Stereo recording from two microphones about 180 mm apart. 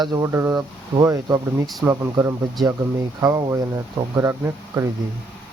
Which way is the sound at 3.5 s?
15° right (ahead or behind).